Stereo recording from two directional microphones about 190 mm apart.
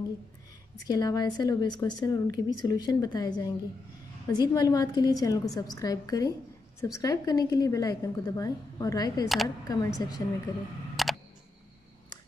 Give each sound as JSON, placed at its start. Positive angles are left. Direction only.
{"t": 0.8, "sound": "a woman's voice", "side_deg": 20}
{"t": 11.0, "sound": "camera", "side_deg": 0}